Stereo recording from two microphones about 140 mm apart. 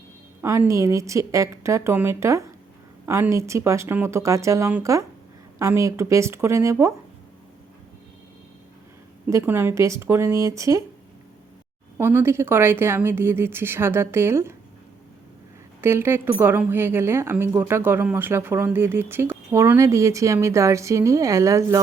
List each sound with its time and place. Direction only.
0.4 s a woman's voice: 20° right (ahead or behind)
9.2 s a woman's voice: 15° right (ahead or behind)
11.9 s a woman's voice: 15° right (ahead or behind)
15.8 s a woman's voice: 15° right (ahead or behind)